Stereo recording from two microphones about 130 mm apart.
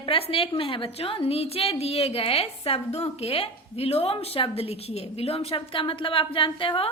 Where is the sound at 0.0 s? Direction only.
45° left (ahead or behind).